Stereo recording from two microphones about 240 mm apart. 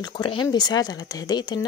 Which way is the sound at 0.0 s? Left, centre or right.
Centre.